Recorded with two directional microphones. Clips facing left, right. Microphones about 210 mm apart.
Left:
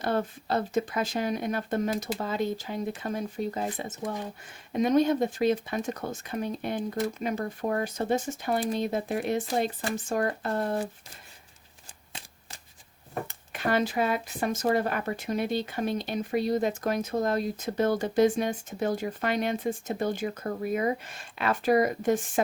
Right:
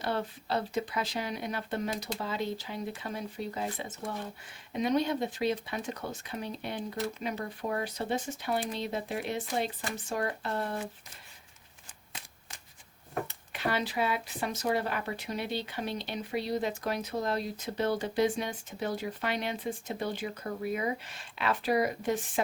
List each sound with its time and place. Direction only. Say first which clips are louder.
0.0 s speech: left 5 dB; 45° left (ahead or behind)
13.2 s speech: left 3 dB; 45° left (ahead or behind)